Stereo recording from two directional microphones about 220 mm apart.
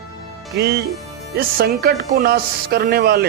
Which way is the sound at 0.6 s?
45° right (ahead or behind).